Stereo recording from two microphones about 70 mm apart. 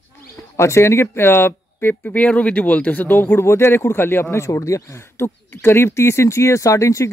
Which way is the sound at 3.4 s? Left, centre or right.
Left.